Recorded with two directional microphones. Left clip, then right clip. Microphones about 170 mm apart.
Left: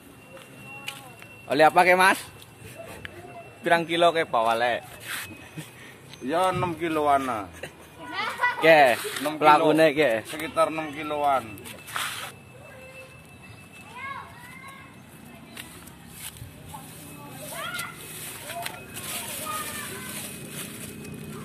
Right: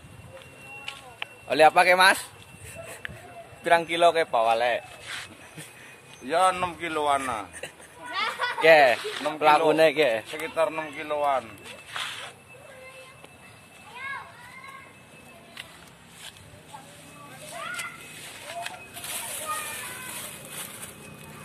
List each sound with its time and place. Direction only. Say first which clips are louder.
1.5 s a man's voice: even; 20° right (ahead or behind)
3.6 s a man's voice: right 1 dB; 10° right (ahead or behind)
5.0 s rub: left 2 dB; 60° left (ahead or behind)
6.2 s a man's voice: right 1 dB; 10° left (ahead or behind)
8.1 s a sound: left 2 dB; 30° right (ahead or behind)
8.5 s speech: even; 10° right (ahead or behind)
8.9 s speech: even; 55° left (ahead or behind)
9.4 s speech: left 2 dB; centre (ahead or behind)
9.7 s speech: even; 10° right (ahead or behind)
11.6 s walk: left 2 dB; 65° left (ahead or behind)
18.2 s a sound: left 1 dB; 60° left (ahead or behind)